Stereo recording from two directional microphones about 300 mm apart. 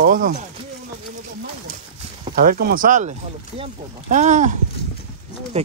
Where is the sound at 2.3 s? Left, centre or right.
Right.